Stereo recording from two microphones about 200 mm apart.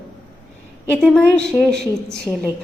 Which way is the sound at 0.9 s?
5° left (ahead or behind).